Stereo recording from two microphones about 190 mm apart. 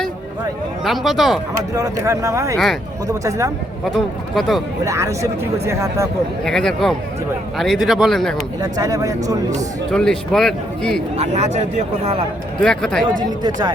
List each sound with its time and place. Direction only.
0.9 s speech: centre (ahead or behind)
1.7 s speech: 15° right (ahead or behind)
3.8 s speech: centre (ahead or behind)
4.9 s speech: 15° right (ahead or behind)
6.4 s speech: 5° left (ahead or behind)
8.6 s speech: 20° right (ahead or behind)
9.9 s speech: 5° left (ahead or behind)
11.2 s speech: 35° right (ahead or behind)
12.5 s speech: 5° left (ahead or behind)
13.1 s speech: 20° right (ahead or behind)